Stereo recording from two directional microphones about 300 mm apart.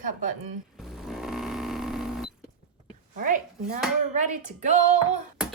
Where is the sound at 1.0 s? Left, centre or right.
Centre.